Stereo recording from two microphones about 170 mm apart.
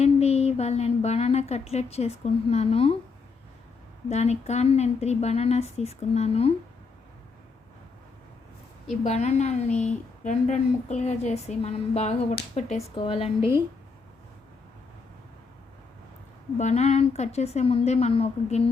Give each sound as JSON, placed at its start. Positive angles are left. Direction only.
{"t": 0.0, "sound": "a woman's voice", "side_deg": 40}
{"t": 4.1, "sound": "a woman's voice", "side_deg": 40}
{"t": 9.0, "sound": "a woman's voice", "side_deg": 40}
{"t": 16.6, "sound": "a woman's voice", "side_deg": 40}